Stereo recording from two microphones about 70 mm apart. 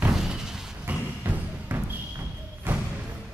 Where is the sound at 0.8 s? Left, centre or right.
Right.